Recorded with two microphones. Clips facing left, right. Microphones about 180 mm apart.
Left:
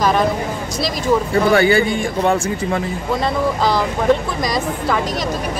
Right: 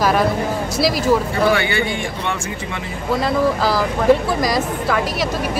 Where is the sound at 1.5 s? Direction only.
40° left (ahead or behind).